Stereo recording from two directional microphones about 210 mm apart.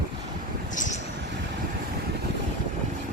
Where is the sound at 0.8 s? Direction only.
35° left (ahead or behind).